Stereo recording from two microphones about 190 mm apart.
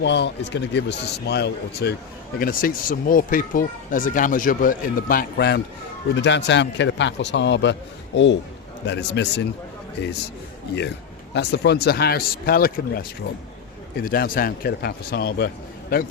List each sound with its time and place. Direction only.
0.0 s speech: 65° left (ahead or behind)
2.4 s speech: 50° left (ahead or behind)
6.1 s a man's voice: 70° left (ahead or behind)
11.3 s speech: 65° left (ahead or behind)